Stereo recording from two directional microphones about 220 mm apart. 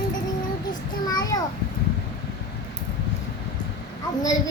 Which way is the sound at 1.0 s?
15° left (ahead or behind).